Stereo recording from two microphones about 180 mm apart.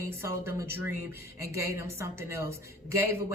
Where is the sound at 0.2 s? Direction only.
15° right (ahead or behind).